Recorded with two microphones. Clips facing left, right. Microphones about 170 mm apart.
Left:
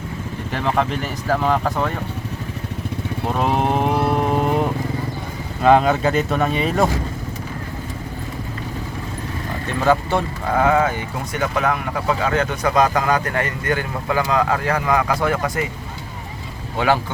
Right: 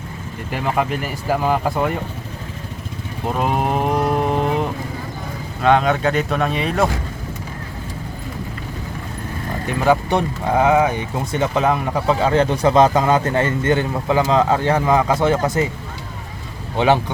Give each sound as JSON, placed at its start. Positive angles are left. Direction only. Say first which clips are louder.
{"t": 0.5, "sound": "speech", "louder": "even", "side_deg": -5}
{"t": 3.3, "sound": "cattle", "louder": "even", "side_deg": 0}
{"t": 5.6, "sound": "speech", "louder": "left 1 dB", "side_deg": 0}
{"t": 9.6, "sound": "speech", "louder": "right 1 dB", "side_deg": -15}
{"t": 16.7, "sound": "speech", "louder": "right 3 dB", "side_deg": -20}